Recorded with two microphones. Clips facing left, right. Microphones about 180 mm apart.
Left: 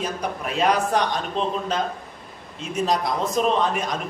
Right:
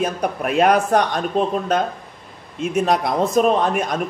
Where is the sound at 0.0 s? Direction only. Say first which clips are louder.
Right 6 dB; 60° right (ahead or behind).